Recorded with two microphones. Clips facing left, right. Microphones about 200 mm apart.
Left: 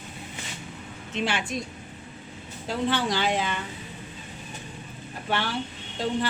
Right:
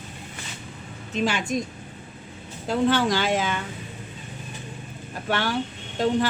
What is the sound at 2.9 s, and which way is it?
Speech, 45° right (ahead or behind).